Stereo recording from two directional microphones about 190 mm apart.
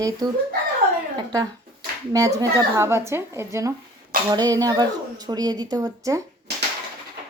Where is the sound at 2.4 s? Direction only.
15° right (ahead or behind).